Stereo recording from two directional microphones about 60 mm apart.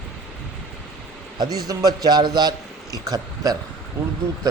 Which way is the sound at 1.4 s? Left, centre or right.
Right.